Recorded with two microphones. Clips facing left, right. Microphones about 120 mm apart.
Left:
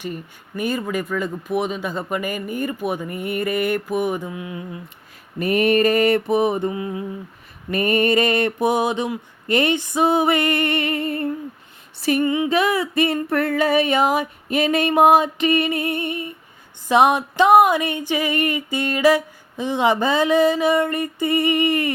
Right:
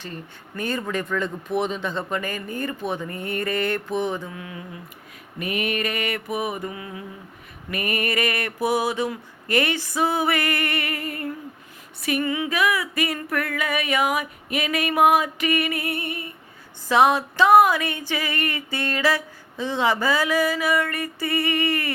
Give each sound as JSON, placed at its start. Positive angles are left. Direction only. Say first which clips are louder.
{"t": 0.0, "sound": "speech", "louder": "left 6 dB", "side_deg": 15}
{"t": 5.4, "sound": "mantra", "louder": "left 9 dB", "side_deg": 35}
{"t": 7.7, "sound": "a sound", "louder": "left 8 dB", "side_deg": 30}